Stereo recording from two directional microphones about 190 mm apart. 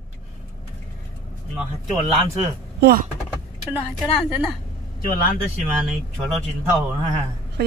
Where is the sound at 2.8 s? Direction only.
55° right (ahead or behind).